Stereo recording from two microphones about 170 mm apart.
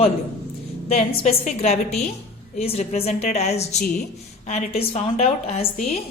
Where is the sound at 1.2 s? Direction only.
40° left (ahead or behind).